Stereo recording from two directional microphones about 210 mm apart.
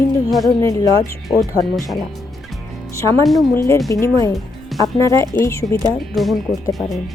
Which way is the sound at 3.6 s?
15° left (ahead or behind).